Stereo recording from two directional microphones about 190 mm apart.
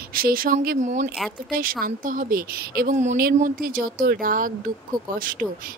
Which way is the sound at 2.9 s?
40° right (ahead or behind).